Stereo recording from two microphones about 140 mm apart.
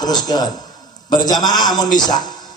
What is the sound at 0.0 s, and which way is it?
A man's voice, 30° left (ahead or behind).